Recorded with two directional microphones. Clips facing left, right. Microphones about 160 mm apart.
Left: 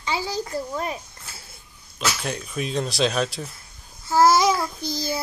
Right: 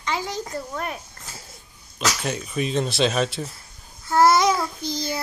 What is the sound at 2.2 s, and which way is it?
Child singing, centre (ahead or behind).